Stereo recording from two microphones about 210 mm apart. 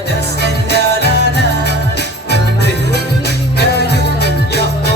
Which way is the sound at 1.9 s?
50° left (ahead or behind).